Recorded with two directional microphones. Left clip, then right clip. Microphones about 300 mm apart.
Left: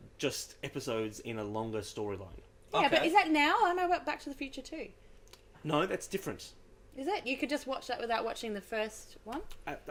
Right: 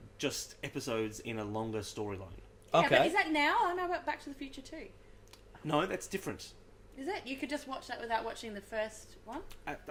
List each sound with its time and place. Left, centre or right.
0.2 s speech: centre
3.2 s a woman's voice: left
5.3 s speech: centre
7.0 s a woman's voice: left
9.7 s speech: centre